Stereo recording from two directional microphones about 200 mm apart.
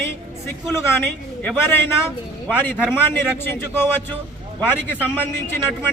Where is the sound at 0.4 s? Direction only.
10° left (ahead or behind).